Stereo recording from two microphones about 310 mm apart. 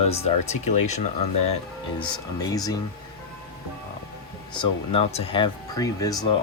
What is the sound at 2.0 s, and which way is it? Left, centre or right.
Speech, centre.